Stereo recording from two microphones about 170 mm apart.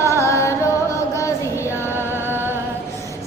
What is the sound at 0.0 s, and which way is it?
Carnatic music, 15° left (ahead or behind).